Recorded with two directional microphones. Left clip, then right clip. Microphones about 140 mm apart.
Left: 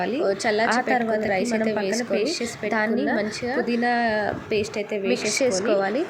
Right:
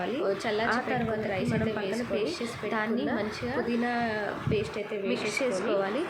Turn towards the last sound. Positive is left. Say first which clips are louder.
# left 6 dB
turn(degrees=35)  # may be behind; listen again after turning